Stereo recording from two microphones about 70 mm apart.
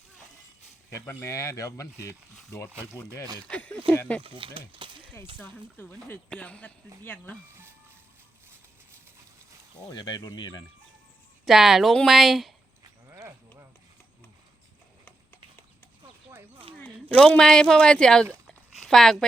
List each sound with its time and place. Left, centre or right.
0.9 s speech: left
3.5 s speech: left
5.1 s speech: left
6.3 s speech: centre
9.9 s speech: left
11.4 s speech: centre
13.1 s a sound: right
16.7 s speech: centre
18.4 s a sound: centre